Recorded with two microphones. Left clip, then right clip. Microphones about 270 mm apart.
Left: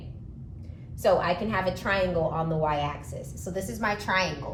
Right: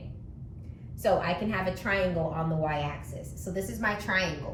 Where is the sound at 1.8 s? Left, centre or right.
Centre.